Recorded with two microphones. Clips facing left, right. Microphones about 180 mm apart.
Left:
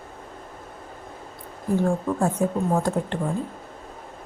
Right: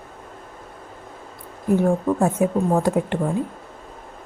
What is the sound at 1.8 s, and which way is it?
Speech, 20° right (ahead or behind).